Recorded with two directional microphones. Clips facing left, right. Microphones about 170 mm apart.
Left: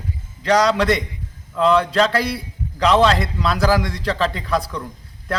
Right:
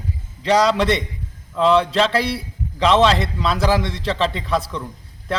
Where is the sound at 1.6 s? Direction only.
Centre (ahead or behind).